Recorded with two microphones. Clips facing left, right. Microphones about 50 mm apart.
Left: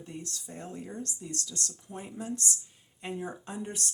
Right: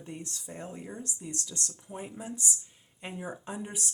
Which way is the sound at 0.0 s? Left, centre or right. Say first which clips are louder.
Even; right.